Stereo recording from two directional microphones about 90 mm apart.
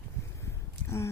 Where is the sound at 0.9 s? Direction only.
30° left (ahead or behind).